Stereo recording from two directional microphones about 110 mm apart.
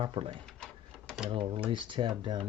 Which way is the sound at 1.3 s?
70° right (ahead or behind).